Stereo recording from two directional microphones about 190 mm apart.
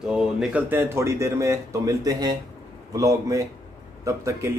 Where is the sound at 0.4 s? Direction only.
5° right (ahead or behind).